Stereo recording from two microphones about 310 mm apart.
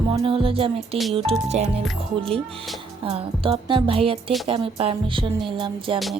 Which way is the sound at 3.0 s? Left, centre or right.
Centre.